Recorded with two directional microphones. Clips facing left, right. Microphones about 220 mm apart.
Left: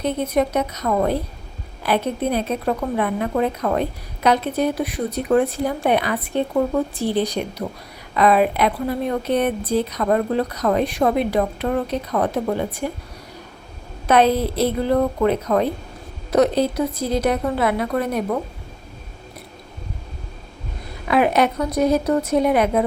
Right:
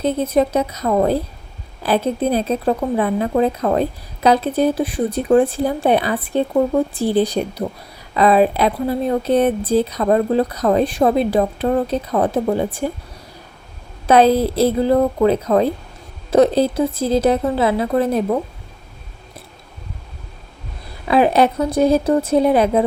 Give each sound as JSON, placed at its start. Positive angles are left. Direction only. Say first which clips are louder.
{"t": 0.0, "sound": "speech", "louder": "right 3 dB", "side_deg": -30}
{"t": 14.1, "sound": "speech", "louder": "right 4 dB", "side_deg": -30}
{"t": 21.1, "sound": "speech", "louder": "right 3 dB", "side_deg": -30}